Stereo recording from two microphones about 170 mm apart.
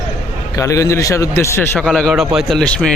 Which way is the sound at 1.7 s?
5° left (ahead or behind).